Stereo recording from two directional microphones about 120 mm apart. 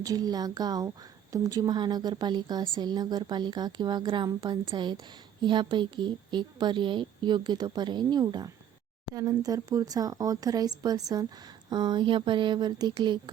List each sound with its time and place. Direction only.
0.0 s a woman's voice: 30° right (ahead or behind)